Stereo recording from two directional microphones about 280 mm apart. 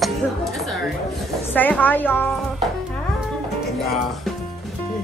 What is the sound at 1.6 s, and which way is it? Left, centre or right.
Speech, centre.